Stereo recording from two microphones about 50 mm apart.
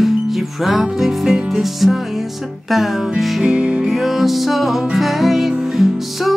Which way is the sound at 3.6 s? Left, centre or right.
Right.